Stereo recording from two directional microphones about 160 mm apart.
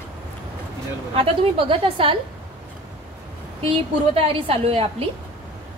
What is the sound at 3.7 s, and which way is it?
A woman's voice, 35° right (ahead or behind).